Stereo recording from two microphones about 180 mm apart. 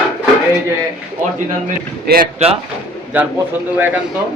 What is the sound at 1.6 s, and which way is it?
Speech, 55° right (ahead or behind).